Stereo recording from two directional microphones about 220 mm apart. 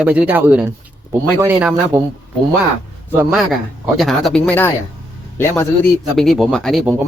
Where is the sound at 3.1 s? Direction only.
5° right (ahead or behind).